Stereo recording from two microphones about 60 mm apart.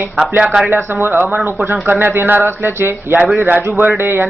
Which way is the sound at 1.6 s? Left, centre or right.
Right.